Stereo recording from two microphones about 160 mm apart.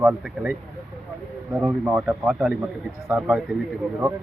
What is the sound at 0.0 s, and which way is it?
Speech, 10° right (ahead or behind).